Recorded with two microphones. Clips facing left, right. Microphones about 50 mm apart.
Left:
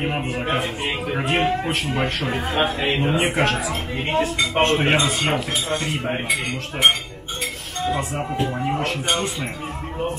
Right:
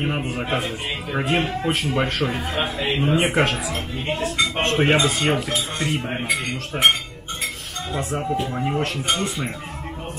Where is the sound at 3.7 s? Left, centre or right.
Left.